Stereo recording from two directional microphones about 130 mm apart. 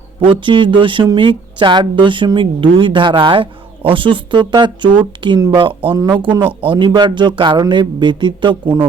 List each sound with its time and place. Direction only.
0.2 s speech: 40° right (ahead or behind)